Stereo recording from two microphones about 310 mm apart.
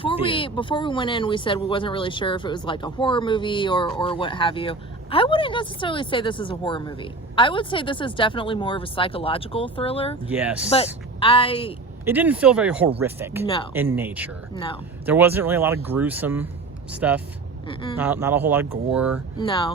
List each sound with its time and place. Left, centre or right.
0.0 s speech: centre
10.2 s speech: centre
11.2 s speech: centre
12.0 s speech: centre
14.5 s speech: centre
15.0 s speech: centre
17.7 s speech: centre
17.9 s speech: centre
19.4 s speech: centre